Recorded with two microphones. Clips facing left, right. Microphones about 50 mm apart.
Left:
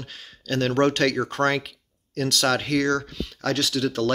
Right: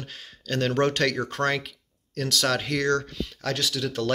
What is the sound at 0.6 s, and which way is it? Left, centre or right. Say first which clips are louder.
Speech: left 3 dB; centre.